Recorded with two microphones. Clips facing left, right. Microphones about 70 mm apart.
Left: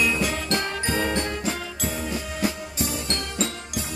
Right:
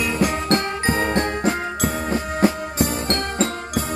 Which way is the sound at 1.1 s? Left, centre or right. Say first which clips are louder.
Right 6 dB; right.